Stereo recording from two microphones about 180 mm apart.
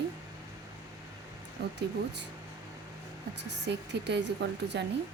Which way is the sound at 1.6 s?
70° right (ahead or behind).